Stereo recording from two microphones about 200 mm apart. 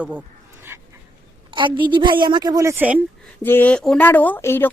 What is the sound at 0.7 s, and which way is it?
Dog, 15° right (ahead or behind).